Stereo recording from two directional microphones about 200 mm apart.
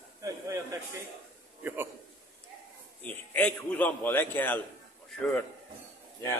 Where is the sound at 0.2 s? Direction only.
15° right (ahead or behind).